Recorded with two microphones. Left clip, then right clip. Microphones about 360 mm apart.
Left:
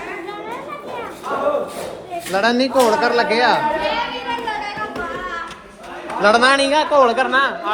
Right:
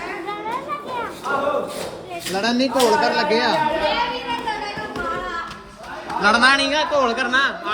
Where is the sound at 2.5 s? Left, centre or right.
Centre.